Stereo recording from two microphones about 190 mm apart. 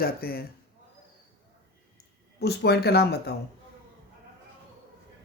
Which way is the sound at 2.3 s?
60° left (ahead or behind).